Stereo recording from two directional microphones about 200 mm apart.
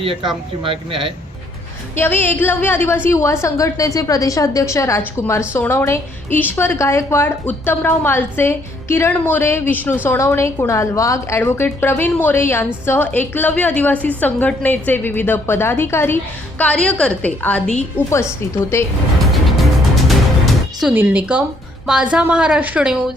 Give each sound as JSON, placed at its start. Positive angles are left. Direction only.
{"t": 0.0, "sound": "speech", "side_deg": -25}
{"t": 2.0, "sound": "a woman's voice", "side_deg": 10}
{"t": 19.3, "sound": "music", "side_deg": 0}
{"t": 21.8, "sound": "a woman's voice", "side_deg": -5}